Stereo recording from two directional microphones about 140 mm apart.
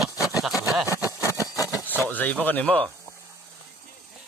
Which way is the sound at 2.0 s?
10° left (ahead or behind).